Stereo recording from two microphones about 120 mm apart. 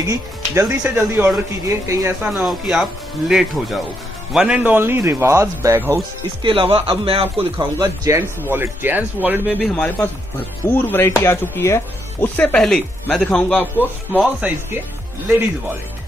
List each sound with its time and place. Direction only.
0.1 s a man's voice: 25° right (ahead or behind)
2.3 s a man's voice: 5° right (ahead or behind)
6.4 s speech: 45° right (ahead or behind)
7.8 s speech: 30° right (ahead or behind)
8.2 s speech: 15° right (ahead or behind)
9.8 s a man's voice: 15° left (ahead or behind)
12.4 s a man's voice: 10° left (ahead or behind)
14.2 s speech: 10° right (ahead or behind)